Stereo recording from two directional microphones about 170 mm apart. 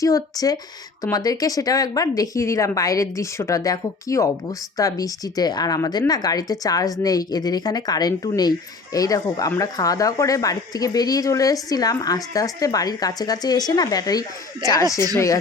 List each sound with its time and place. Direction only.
0.0 s speech: 20° left (ahead or behind)